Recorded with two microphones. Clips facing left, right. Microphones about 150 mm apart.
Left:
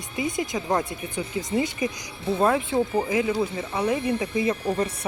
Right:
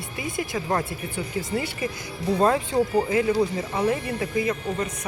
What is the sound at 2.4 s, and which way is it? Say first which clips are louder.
Speech: even; 5° left (ahead or behind).